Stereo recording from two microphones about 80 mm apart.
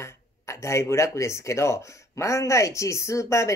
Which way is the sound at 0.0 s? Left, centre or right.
Left.